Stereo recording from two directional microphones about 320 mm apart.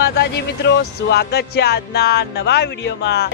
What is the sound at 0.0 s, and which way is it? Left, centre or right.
Speech, left.